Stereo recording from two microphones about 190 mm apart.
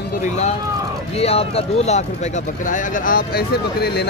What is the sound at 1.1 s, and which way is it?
Speech, 30° left (ahead or behind).